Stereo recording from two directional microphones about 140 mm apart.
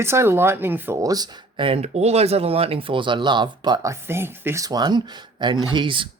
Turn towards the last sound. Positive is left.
turn(degrees=-35)  # may be behind; listen again after turning